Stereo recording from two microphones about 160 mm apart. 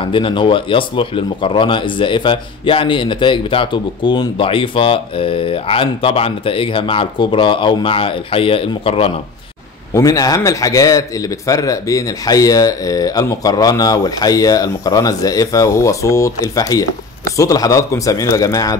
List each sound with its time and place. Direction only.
0.0 s a man's voice: 30° left (ahead or behind)
9.9 s a man's voice: 20° left (ahead or behind)